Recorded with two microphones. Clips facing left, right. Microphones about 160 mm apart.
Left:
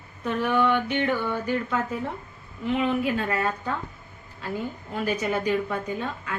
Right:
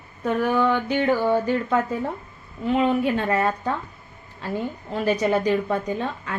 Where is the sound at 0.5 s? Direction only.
30° right (ahead or behind).